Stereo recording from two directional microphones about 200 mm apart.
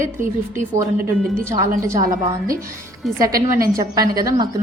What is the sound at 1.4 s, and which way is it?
Speech, 15° right (ahead or behind).